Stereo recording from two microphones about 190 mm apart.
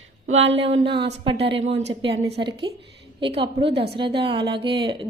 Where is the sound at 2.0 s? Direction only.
30° right (ahead or behind).